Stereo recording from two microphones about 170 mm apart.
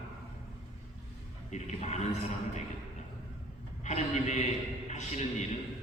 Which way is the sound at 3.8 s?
45° left (ahead or behind).